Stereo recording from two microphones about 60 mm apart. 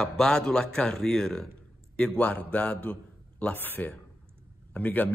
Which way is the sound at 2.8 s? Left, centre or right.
Left.